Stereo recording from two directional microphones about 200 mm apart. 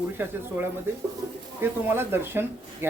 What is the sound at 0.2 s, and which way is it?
Speech, 10° right (ahead or behind).